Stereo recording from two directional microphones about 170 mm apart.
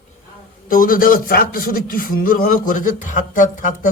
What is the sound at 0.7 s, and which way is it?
A man's voice, 55° left (ahead or behind).